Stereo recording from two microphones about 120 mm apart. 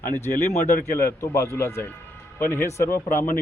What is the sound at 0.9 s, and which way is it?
Speech, 20° left (ahead or behind).